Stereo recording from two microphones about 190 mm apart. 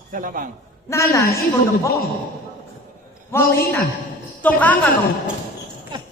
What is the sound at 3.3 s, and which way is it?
Speech, 10° left (ahead or behind).